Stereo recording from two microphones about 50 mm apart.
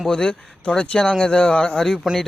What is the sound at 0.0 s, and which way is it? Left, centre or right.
Speech, centre.